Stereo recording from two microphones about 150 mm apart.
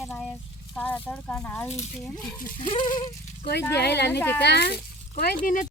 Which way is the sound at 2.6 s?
35° left (ahead or behind).